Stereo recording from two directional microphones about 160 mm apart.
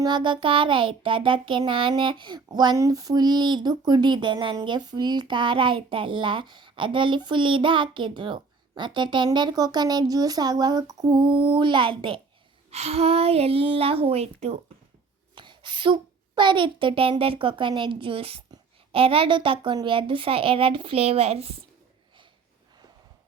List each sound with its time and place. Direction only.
0.0 s a woman's voice: 30° right (ahead or behind)
15.4 s a child's voice: 30° right (ahead or behind)